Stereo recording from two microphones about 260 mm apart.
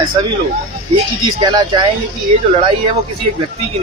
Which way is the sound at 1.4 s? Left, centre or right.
Centre.